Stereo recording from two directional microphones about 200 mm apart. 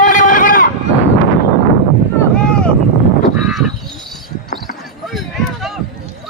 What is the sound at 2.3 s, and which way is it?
Boat, 5° left (ahead or behind).